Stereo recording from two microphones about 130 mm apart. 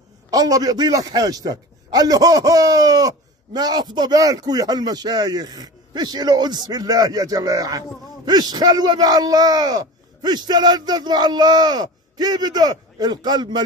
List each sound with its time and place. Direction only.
0.3 s a man's voice: 30° right (ahead or behind)